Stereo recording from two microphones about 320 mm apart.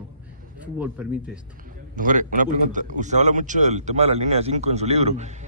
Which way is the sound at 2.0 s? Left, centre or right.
Right.